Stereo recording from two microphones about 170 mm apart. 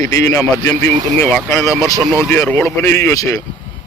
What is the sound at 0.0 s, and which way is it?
Speech, 20° left (ahead or behind).